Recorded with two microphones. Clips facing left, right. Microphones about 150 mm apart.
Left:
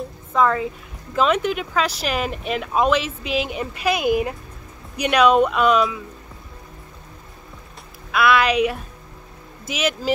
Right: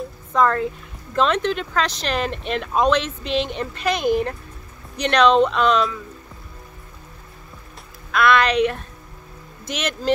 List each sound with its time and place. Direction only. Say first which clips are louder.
0.3 s speech: even; 5° left (ahead or behind)
8.1 s speech: even; 5° left (ahead or behind)